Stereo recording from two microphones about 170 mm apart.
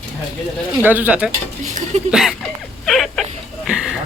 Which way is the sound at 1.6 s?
45° right (ahead or behind).